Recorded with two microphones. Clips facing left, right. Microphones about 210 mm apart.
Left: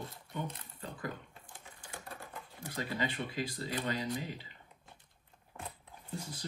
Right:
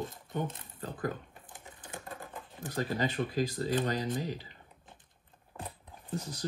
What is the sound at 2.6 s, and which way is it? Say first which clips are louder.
Speech: right 5 dB; 45° right (ahead or behind).